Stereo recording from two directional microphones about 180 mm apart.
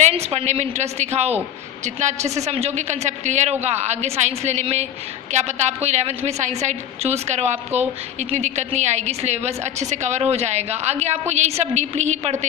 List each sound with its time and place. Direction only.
0.0 s a woman's voice: 35° right (ahead or behind)